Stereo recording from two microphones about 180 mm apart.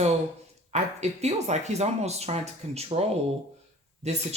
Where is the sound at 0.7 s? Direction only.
40° right (ahead or behind).